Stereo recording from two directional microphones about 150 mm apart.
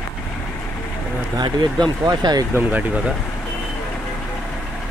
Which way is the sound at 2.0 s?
25° right (ahead or behind).